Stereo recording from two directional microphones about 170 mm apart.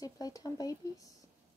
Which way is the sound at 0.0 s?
20° left (ahead or behind).